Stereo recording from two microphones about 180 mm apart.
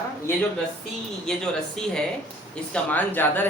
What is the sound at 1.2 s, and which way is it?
Speech, 5° left (ahead or behind).